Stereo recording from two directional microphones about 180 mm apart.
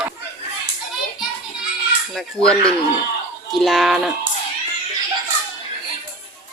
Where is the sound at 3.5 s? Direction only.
Centre (ahead or behind).